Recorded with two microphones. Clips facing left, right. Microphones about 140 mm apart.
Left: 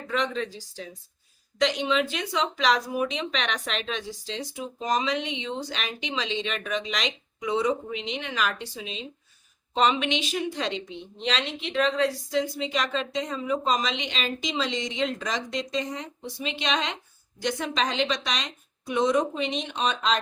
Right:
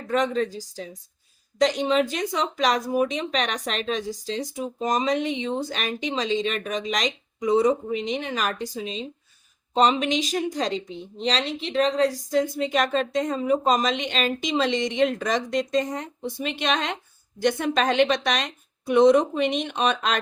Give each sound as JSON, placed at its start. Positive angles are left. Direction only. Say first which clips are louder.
{"t": 0.1, "sound": "a woman's voice", "louder": "right 5 dB", "side_deg": -45}